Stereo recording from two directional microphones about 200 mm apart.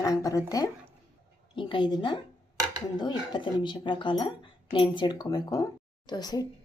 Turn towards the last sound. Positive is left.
turn(degrees=20)  # may be behind; listen again after turning